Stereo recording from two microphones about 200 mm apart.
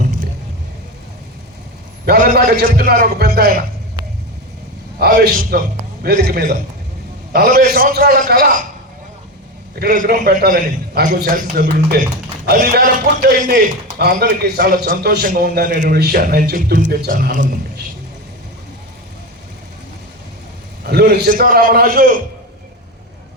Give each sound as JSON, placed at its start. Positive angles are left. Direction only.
{"t": 2.0, "sound": "a man's voice", "side_deg": -50}
{"t": 4.9, "sound": "a man's voice", "side_deg": -50}
{"t": 9.7, "sound": "a man's voice", "side_deg": -45}
{"t": 13.2, "sound": "a man's voice", "side_deg": -50}
{"t": 20.8, "sound": "a man's voice", "side_deg": -50}